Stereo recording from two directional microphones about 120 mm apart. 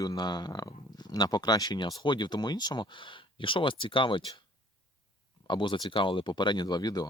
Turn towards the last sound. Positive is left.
turn(degrees=35)  # may be behind; listen again after turning